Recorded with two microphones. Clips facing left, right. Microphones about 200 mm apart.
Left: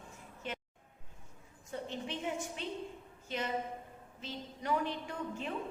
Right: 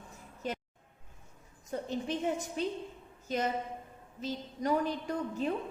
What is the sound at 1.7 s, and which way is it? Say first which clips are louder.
A woman's voice: right 6 dB; 40° right (ahead or behind).